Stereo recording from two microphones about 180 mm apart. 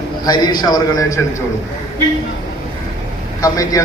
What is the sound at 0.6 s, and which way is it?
Speech, 20° left (ahead or behind).